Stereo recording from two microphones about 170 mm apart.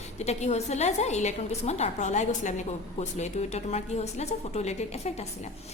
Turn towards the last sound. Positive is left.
turn(degrees=40)  # may be behind; listen again after turning